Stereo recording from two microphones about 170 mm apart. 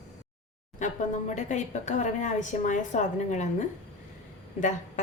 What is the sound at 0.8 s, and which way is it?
Speech, 45° left (ahead or behind).